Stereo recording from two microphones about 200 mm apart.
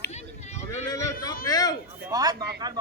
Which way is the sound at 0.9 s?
20° left (ahead or behind).